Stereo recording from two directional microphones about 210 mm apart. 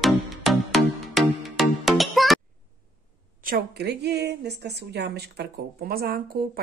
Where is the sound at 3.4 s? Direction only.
45° right (ahead or behind).